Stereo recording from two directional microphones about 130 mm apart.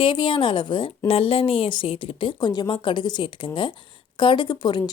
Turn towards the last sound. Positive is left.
turn(degrees=35)  # may be behind; listen again after turning